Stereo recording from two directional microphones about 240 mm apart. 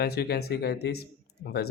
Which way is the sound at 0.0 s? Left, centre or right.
Left.